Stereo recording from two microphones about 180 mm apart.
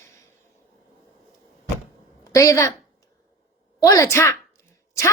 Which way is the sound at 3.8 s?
20° left (ahead or behind).